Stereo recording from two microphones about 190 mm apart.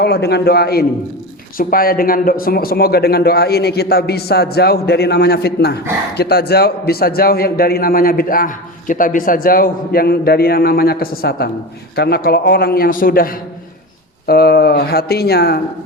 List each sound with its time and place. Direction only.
0.0 s a man's voice: 60° left (ahead or behind)